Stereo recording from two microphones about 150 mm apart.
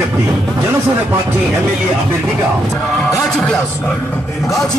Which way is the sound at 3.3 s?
5° left (ahead or behind).